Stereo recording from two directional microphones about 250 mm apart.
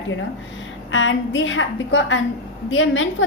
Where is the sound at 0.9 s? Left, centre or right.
Left.